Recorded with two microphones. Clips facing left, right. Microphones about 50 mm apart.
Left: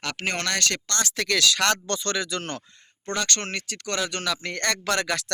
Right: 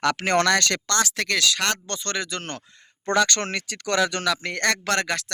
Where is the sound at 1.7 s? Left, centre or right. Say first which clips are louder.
Left 3 dB; right.